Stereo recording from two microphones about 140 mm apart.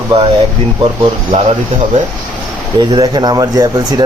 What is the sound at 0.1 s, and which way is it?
Speech, 35° right (ahead or behind).